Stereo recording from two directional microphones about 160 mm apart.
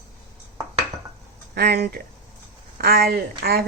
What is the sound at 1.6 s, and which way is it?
A woman's voice, 80° right.